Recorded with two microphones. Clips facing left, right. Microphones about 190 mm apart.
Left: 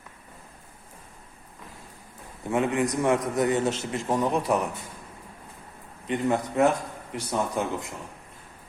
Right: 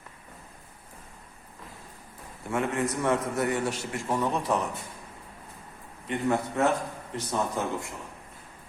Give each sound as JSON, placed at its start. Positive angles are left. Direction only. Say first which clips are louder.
{"t": 2.4, "sound": "a man's voice", "louder": "left 4 dB", "side_deg": 20}
{"t": 6.1, "sound": "a man's voice", "louder": "left 2 dB", "side_deg": 20}